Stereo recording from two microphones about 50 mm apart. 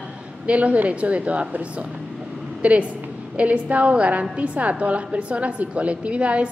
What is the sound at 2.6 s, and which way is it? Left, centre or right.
A woman's voice, right.